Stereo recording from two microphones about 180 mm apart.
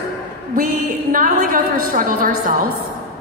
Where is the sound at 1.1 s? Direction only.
50° right (ahead or behind).